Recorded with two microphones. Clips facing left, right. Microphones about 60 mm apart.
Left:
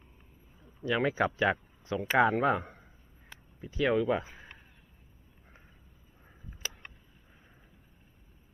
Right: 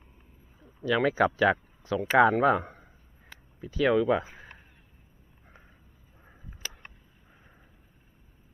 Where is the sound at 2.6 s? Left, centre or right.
Centre.